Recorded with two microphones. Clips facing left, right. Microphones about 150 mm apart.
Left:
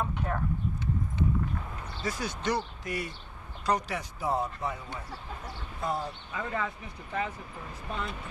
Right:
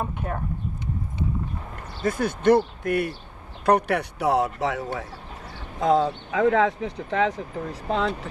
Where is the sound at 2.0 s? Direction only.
55° right (ahead or behind).